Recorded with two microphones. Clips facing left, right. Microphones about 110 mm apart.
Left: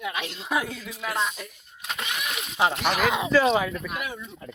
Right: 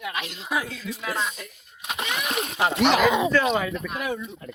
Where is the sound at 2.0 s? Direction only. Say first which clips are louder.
Right 7 dB; 50° right (ahead or behind).